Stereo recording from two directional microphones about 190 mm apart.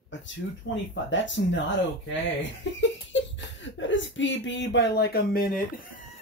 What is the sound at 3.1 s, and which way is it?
Speech, 75° left (ahead or behind).